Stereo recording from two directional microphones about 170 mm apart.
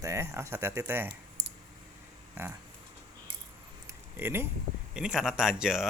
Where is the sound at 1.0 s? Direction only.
90° right.